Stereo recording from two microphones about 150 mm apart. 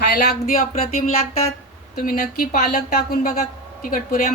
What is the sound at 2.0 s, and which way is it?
Speech, 70° left (ahead or behind).